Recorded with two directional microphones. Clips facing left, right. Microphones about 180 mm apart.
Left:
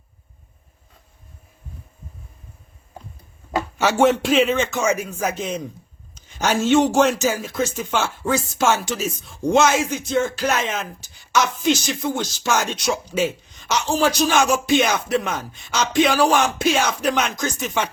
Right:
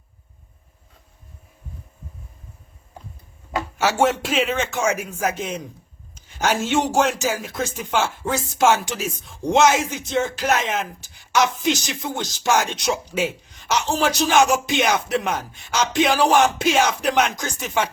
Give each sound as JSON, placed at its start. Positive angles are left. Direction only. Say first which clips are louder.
{"t": 3.8, "sound": "speech", "louder": "left 3 dB", "side_deg": -5}
{"t": 11.3, "sound": "speech", "louder": "left 1 dB", "side_deg": -15}